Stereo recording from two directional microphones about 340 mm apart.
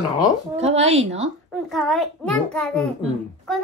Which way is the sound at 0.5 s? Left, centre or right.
Centre.